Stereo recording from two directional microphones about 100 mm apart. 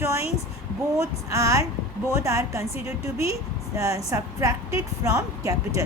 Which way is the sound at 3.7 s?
30° right (ahead or behind).